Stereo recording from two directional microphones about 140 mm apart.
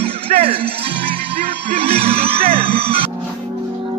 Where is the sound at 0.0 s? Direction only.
45° right (ahead or behind).